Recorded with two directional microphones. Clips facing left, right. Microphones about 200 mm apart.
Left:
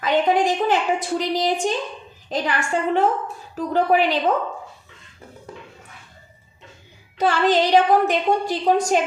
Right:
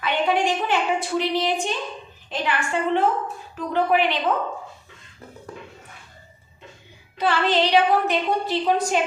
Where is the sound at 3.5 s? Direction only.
40° left (ahead or behind).